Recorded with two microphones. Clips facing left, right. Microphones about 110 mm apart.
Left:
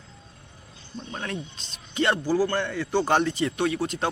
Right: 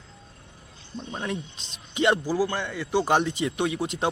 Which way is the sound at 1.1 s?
10° right (ahead or behind).